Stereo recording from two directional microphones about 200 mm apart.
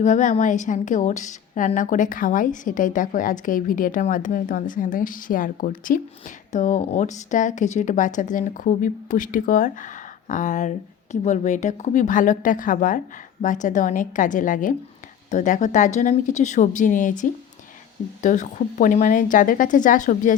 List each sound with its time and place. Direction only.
0.0 s a woman's voice: 40° left (ahead or behind)